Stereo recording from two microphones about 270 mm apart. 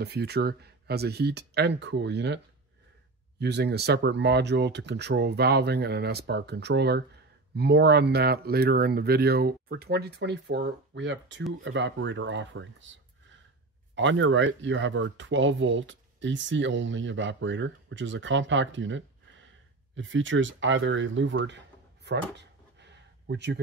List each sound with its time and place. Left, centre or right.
0.0 s speech: right
13.9 s speech: right